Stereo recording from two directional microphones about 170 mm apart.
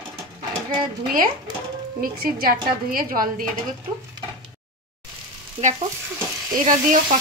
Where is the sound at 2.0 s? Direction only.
60° right (ahead or behind).